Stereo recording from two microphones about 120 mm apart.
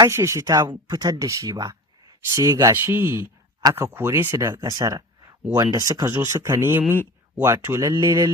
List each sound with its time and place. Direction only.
0.0 s speech: 25° right (ahead or behind)